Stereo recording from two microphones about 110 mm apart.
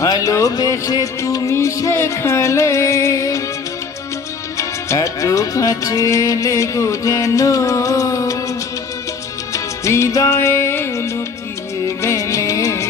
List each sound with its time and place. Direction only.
0.0 s music: 30° left (ahead or behind)
4.5 s music: 30° left (ahead or behind)
9.5 s music: 25° left (ahead or behind)